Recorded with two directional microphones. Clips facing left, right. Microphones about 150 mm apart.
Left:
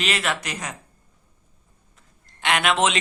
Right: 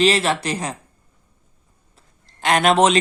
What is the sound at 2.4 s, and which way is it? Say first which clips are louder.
Speech: right 6 dB; 40° right (ahead or behind).